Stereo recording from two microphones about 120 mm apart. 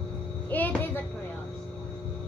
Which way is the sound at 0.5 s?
15° left (ahead or behind).